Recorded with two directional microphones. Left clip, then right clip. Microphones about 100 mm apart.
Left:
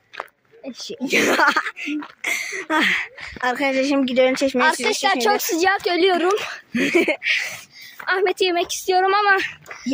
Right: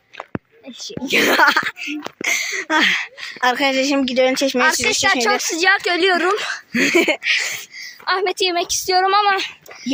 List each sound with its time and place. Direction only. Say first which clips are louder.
1.1 s speech: right 3 dB; centre (ahead or behind)
4.0 s speech: right 1 dB; 15° left (ahead or behind)
4.6 s a woman's voice: right 3 dB; 55° left (ahead or behind)
5.7 s a woman's voice: right 2 dB; 25° left (ahead or behind)
6.7 s speech: right 3 dB; 5° right (ahead or behind)
7.2 s a woman's voice: right 3 dB; 45° left (ahead or behind)
9.1 s speech: right 1 dB; 80° left